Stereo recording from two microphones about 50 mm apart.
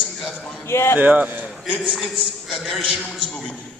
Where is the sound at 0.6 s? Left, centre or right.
Left.